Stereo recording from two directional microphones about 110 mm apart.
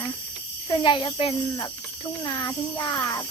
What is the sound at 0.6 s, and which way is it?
A child's voice, 45° left (ahead or behind).